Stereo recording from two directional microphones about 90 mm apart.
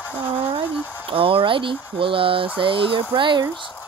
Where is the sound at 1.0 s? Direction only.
85° right.